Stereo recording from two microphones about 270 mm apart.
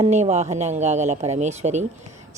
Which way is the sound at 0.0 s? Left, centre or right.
Right.